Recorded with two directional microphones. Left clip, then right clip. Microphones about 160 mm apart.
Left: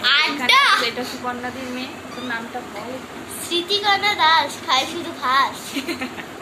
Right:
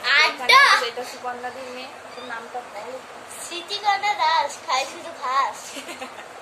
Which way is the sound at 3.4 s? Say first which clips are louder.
Left 4 dB; 20° right (ahead or behind).